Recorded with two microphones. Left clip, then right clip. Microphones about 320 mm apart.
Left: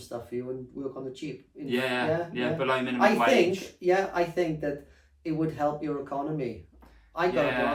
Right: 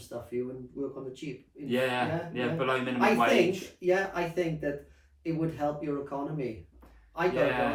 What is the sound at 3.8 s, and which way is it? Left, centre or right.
Speech, centre.